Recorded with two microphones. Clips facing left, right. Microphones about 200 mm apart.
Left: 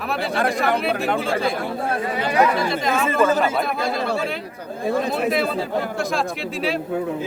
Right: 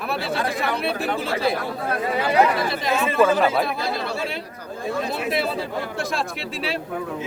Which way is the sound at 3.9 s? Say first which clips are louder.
Left 4 dB; 50° left (ahead or behind).